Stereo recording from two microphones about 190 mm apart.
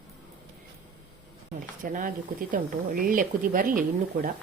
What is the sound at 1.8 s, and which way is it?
Speech, 45° right (ahead or behind).